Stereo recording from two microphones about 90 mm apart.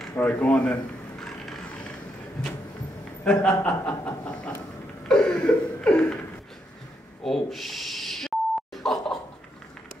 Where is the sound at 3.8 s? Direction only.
20° left (ahead or behind).